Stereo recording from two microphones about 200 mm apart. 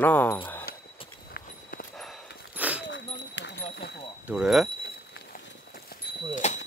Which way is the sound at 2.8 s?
65° left (ahead or behind).